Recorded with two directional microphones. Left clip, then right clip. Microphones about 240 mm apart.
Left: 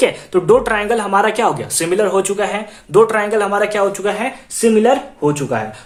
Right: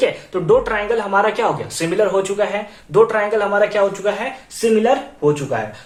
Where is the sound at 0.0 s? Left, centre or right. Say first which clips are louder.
Left 4 dB; left.